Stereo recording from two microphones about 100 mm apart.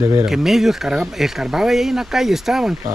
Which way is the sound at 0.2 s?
5° right (ahead or behind).